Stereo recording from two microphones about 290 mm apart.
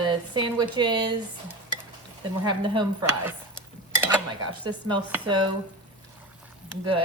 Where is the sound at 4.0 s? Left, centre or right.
Centre.